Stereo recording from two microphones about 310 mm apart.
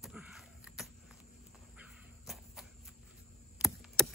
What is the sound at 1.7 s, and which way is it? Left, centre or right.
Cricket, centre.